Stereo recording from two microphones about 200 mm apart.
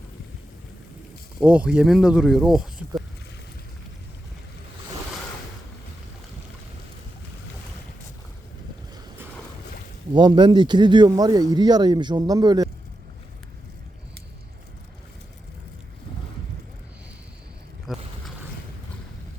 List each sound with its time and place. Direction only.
1.4 s speech: 5° right (ahead or behind)
10.2 s speech: 20° right (ahead or behind)
17.9 s boat: centre (ahead or behind)